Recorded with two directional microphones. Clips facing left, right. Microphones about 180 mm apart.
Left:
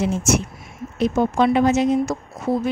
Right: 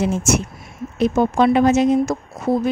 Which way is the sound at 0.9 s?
45° right (ahead or behind).